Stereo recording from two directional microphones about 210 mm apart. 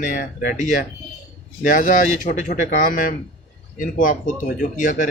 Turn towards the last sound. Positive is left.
turn(degrees=40)  # may be behind; listen again after turning